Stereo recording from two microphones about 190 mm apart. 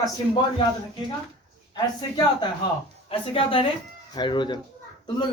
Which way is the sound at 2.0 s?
20° left (ahead or behind).